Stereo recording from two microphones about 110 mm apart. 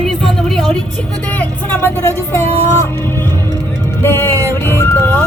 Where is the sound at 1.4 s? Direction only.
15° left (ahead or behind).